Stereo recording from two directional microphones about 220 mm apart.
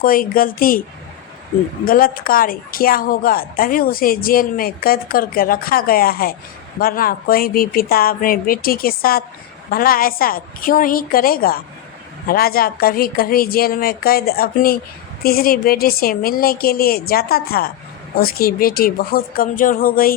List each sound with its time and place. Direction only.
0.0 s a woman's voice: 40° left (ahead or behind)
1.8 s a woman's voice: 40° left (ahead or behind)